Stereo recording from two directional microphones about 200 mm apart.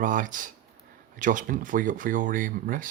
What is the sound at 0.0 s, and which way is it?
Speech, 40° right (ahead or behind).